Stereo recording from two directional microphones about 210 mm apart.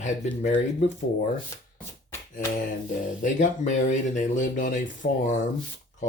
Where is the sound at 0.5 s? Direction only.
35° left (ahead or behind).